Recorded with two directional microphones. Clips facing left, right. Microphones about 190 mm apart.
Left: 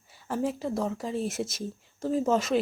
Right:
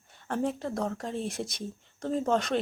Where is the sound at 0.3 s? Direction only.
5° left (ahead or behind).